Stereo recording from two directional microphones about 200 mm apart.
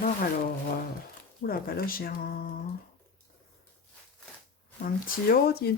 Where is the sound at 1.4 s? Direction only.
45° left (ahead or behind).